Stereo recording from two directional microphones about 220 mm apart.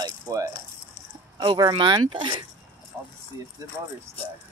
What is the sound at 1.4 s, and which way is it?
Speech, 20° right (ahead or behind).